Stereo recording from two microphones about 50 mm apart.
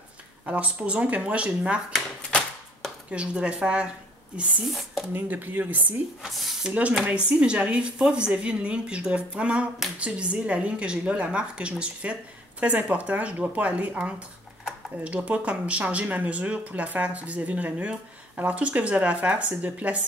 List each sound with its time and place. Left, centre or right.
0.5 s speech: right
3.1 s speech: right
5.1 s speech: right
6.2 s speech: centre
6.7 s speech: right